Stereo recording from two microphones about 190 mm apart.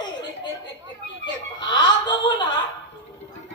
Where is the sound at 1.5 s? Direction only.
25° left (ahead or behind).